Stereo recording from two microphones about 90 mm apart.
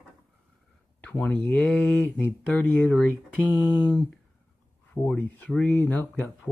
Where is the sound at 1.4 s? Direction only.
5° left (ahead or behind).